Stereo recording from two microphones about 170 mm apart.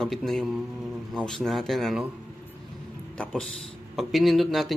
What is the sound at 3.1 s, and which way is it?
A man's voice, 5° left (ahead or behind).